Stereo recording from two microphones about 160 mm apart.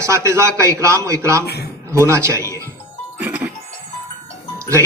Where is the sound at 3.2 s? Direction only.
10° right (ahead or behind).